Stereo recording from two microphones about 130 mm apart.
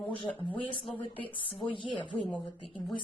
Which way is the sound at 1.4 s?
40° left (ahead or behind).